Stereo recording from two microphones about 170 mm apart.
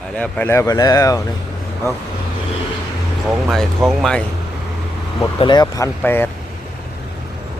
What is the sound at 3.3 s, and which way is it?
Speech, centre (ahead or behind).